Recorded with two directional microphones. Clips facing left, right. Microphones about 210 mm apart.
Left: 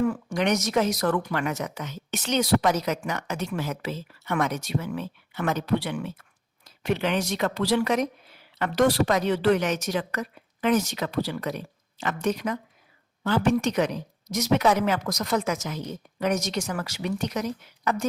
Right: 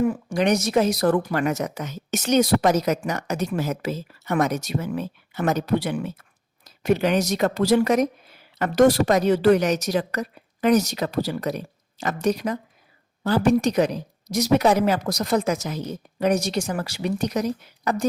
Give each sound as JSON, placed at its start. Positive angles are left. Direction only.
{"t": 0.0, "sound": "a woman's voice", "side_deg": -25}